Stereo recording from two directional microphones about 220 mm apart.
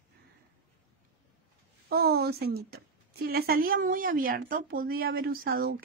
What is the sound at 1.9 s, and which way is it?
A woman's voice, 45° right (ahead or behind).